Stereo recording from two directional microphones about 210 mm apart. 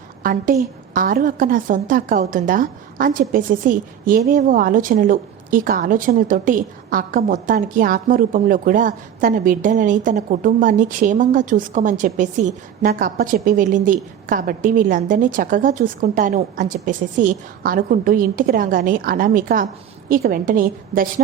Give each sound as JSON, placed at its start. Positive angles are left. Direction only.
{"t": 0.2, "sound": "a woman's voice", "side_deg": -40}